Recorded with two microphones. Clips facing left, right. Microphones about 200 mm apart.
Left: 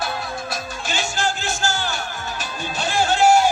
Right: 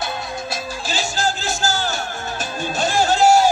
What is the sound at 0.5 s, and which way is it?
Music, 35° right (ahead or behind).